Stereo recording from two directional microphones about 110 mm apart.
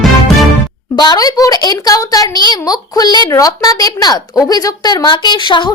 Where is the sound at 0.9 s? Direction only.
40° left (ahead or behind).